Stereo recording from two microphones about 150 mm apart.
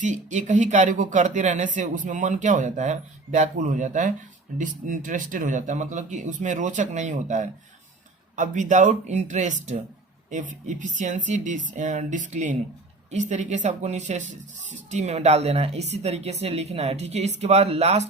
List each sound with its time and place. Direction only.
0.0 s speech: 55° right (ahead or behind)